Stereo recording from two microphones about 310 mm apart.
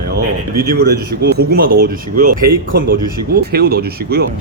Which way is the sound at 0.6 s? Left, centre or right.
Right.